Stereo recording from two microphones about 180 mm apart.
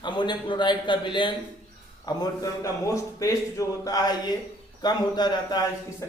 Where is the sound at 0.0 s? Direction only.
25° left (ahead or behind).